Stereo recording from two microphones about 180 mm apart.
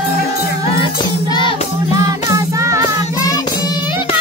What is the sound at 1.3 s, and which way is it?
Music, 25° left (ahead or behind).